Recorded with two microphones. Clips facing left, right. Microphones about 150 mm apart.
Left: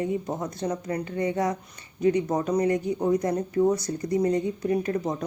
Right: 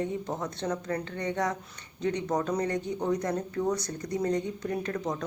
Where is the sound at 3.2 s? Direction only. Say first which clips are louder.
Left 6 dB; 20° left (ahead or behind).